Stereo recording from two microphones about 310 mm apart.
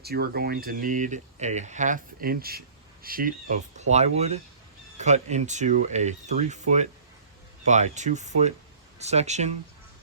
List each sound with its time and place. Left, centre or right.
0.0 s speech: right